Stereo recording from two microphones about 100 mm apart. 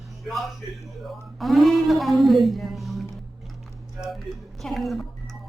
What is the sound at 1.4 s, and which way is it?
A man's voice, centre (ahead or behind).